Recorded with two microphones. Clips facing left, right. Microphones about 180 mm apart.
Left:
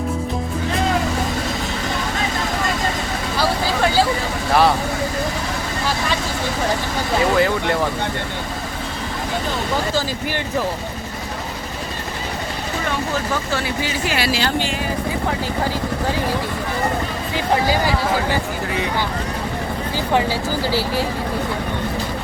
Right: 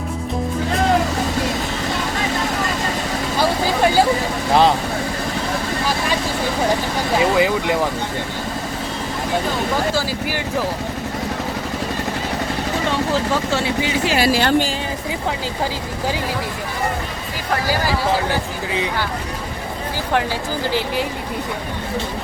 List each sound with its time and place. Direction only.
7.3 s speech: 15° right (ahead or behind)
13.3 s speech: 25° right (ahead or behind)
14.2 s a woman's voice: 45° right (ahead or behind)